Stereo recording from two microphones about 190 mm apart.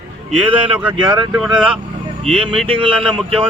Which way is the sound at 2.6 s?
25° right (ahead or behind).